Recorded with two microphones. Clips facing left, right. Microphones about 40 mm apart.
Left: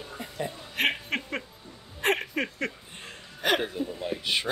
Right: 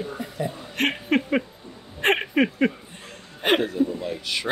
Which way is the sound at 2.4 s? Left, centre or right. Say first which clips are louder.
Right 10 dB; centre.